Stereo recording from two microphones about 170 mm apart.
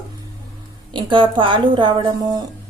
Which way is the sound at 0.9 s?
25° right (ahead or behind).